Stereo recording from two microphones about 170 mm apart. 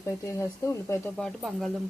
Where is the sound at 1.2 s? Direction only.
Centre (ahead or behind).